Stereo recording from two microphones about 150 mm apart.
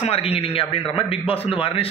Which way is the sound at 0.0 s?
40° left (ahead or behind).